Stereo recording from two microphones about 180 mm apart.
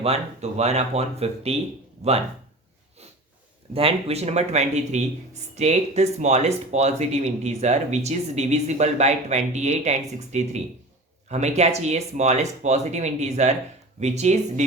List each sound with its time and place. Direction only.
0.0 s speech: 35° right (ahead or behind)
3.8 s speech: 30° right (ahead or behind)